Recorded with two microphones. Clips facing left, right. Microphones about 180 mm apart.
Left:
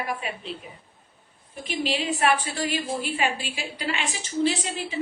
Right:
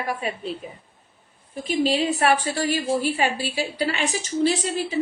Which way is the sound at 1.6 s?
40° right (ahead or behind).